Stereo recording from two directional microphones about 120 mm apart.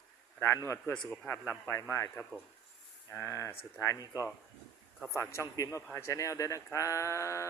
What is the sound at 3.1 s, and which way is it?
Speech, 25° left (ahead or behind).